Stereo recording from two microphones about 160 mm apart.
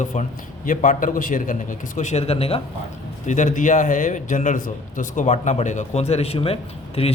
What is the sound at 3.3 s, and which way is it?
A man's voice, 50° left (ahead or behind).